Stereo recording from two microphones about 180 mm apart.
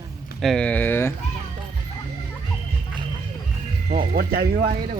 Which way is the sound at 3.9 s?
55° right (ahead or behind).